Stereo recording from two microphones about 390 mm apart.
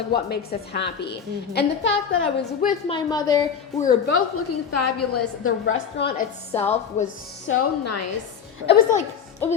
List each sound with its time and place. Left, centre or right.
0.1 s a woman's voice: left
3.8 s a woman's voice: left
7.4 s a woman's voice: left
8.6 s a woman's voice: centre